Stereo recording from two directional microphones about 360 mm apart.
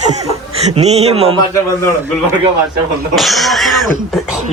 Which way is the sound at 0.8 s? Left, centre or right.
Centre.